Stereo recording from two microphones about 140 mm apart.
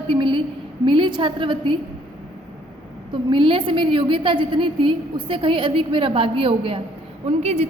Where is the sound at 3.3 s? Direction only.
35° right (ahead or behind).